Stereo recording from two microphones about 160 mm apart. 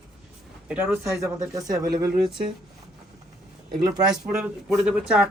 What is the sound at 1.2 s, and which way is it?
Speech, 20° right (ahead or behind).